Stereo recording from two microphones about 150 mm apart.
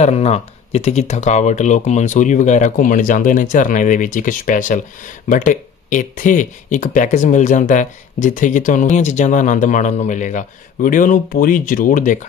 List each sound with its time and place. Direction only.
0.0 s speech: 45° left (ahead or behind)